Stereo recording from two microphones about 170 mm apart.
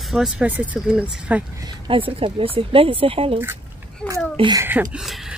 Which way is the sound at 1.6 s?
30° right (ahead or behind).